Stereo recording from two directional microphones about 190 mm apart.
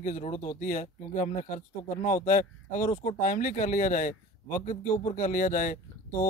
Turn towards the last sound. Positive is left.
turn(degrees=45)  # may be behind; listen again after turning